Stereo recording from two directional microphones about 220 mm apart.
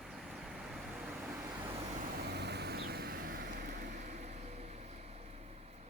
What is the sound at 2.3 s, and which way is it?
Vehicle, 50° right (ahead or behind).